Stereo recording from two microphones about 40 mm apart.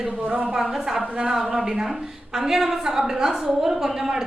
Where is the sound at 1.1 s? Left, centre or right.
Centre.